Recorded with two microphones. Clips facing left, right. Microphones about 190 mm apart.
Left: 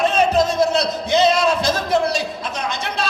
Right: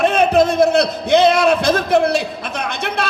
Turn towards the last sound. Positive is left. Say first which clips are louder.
# right 2 dB
turn(degrees=-60)  # may be behind; listen again after turning